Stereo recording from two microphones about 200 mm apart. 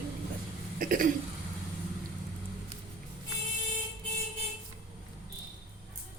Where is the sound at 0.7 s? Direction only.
45° right (ahead or behind).